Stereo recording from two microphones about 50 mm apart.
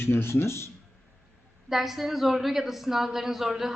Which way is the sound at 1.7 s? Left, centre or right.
Centre.